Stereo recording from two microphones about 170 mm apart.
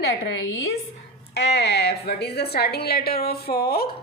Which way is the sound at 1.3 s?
80° left.